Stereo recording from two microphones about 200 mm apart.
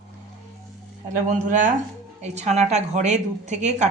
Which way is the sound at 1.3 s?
40° right (ahead or behind).